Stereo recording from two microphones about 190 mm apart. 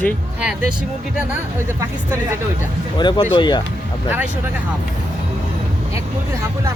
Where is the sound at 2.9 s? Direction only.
25° left (ahead or behind).